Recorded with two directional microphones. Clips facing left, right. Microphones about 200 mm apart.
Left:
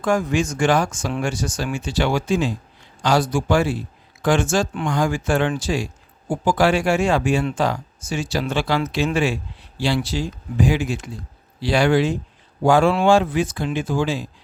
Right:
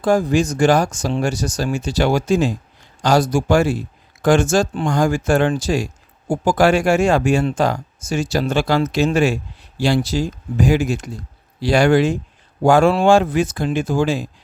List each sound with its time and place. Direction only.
0.0 s speech: 35° right (ahead or behind)